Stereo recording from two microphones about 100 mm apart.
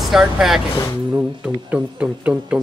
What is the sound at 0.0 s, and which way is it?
Speech, 5° right (ahead or behind).